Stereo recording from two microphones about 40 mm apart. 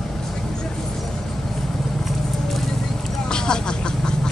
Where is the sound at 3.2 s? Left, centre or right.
Centre.